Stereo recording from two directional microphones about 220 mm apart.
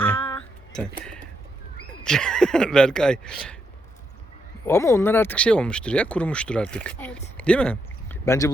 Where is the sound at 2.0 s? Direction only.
5° left (ahead or behind).